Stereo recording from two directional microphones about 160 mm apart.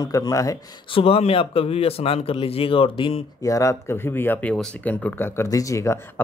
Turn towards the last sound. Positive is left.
turn(degrees=20)  # may be behind; listen again after turning